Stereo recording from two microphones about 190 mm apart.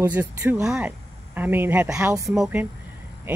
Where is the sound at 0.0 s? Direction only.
10° right (ahead or behind).